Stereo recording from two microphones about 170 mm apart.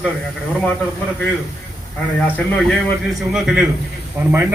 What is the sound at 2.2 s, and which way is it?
Speech, 10° left (ahead or behind).